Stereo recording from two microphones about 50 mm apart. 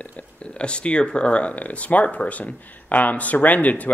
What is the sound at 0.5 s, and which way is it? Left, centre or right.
Speech, left.